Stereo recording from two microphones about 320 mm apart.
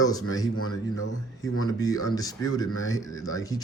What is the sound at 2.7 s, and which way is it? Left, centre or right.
Speech, left.